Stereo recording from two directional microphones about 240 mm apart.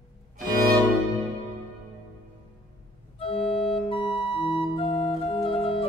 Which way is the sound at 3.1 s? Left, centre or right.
Left.